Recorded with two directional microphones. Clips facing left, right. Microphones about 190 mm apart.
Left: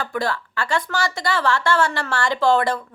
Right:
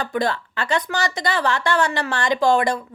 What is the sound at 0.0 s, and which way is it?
A woman's voice, 20° right (ahead or behind).